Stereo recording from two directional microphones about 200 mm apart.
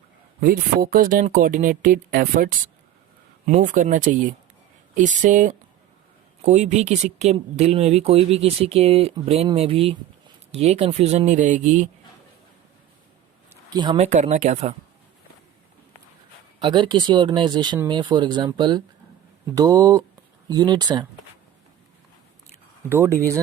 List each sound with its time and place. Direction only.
0.3 s speech: 45° right (ahead or behind)
13.5 s speech: 20° right (ahead or behind)
16.6 s speech: 25° right (ahead or behind)
22.9 s speech: 10° right (ahead or behind)